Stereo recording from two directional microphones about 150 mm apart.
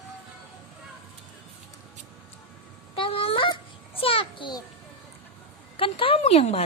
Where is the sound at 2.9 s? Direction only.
35° left (ahead or behind).